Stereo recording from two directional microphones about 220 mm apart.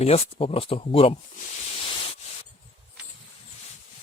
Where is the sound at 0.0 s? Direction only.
25° left (ahead or behind).